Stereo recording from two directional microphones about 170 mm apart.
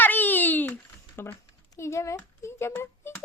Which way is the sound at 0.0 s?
10° left (ahead or behind).